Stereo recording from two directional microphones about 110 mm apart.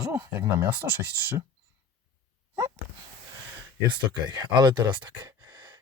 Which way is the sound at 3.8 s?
40° right (ahead or behind).